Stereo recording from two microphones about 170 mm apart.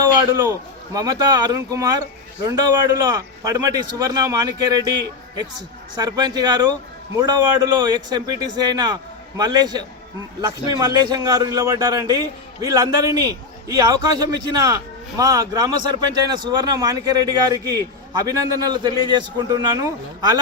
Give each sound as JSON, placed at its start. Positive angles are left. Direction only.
{"t": 0.9, "sound": "a man's voice", "side_deg": -25}
{"t": 6.0, "sound": "a man's voice", "side_deg": -25}